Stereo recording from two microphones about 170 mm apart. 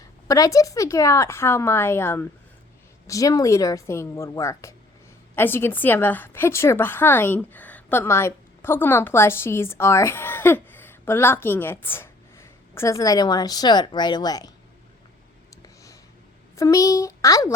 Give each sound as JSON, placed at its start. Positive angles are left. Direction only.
{"t": 0.0, "sound": "a woman's voice", "side_deg": 20}
{"t": 15.6, "sound": "a sound", "side_deg": 20}
{"t": 16.6, "sound": "a woman's voice", "side_deg": 20}